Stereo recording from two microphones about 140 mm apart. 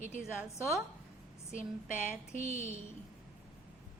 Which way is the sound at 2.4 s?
50° right (ahead or behind).